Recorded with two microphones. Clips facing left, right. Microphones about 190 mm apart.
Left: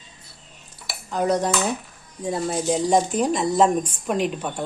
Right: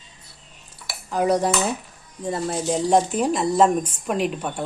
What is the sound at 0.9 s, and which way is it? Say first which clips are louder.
Dishes: right 1 dB; 10° right (ahead or behind).